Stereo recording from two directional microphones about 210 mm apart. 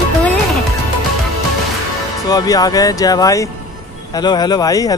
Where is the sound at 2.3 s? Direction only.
15° left (ahead or behind).